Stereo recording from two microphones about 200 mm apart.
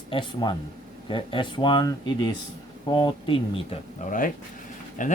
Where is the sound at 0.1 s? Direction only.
25° left (ahead or behind).